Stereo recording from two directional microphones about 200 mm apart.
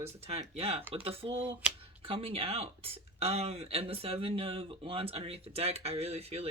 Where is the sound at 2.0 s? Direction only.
30° right (ahead or behind).